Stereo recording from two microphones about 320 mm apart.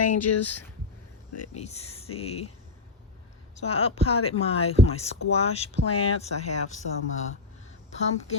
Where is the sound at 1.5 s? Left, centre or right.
Centre.